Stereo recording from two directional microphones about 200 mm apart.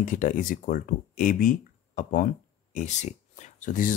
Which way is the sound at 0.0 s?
40° left (ahead or behind).